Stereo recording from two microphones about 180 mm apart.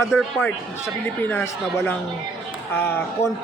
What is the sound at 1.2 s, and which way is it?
Speech, 15° left (ahead or behind).